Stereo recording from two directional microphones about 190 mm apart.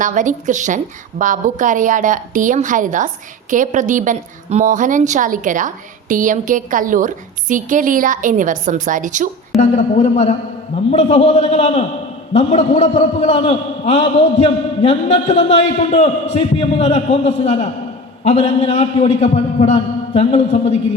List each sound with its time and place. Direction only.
0.0 s a woman's voice: 40° right (ahead or behind)
9.6 s a man's voice: 35° left (ahead or behind)